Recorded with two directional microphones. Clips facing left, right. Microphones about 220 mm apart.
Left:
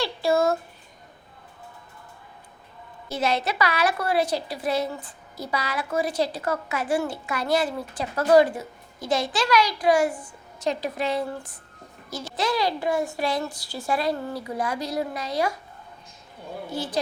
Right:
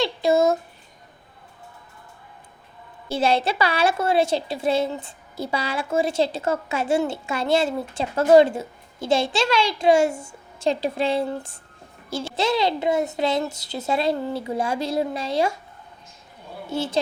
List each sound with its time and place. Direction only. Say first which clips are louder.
0.0 s a sound: right 3 dB; 20° right (ahead or behind)
3.1 s a woman's voice: right 4 dB; 30° right (ahead or behind)
16.6 s a woman's voice: right 5 dB; 25° right (ahead or behind)